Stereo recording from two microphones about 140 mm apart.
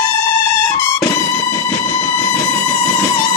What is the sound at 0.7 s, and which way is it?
Music, 20° left (ahead or behind).